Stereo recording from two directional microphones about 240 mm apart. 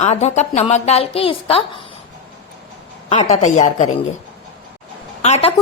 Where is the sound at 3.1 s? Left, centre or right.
Left.